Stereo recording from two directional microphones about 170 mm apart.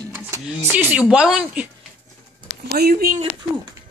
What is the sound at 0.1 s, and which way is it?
Speech, 15° right (ahead or behind).